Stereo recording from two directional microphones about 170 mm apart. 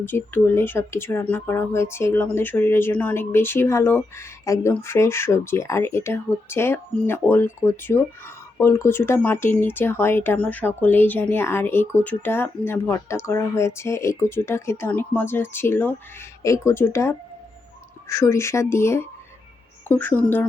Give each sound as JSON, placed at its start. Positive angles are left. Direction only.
{"t": 0.0, "sound": "speech", "side_deg": 10}